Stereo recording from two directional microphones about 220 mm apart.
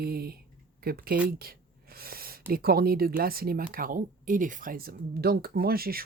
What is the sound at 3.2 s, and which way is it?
Speech, 40° right (ahead or behind).